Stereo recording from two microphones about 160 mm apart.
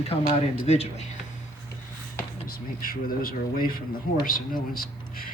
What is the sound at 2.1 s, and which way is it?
Speech, 65° left (ahead or behind).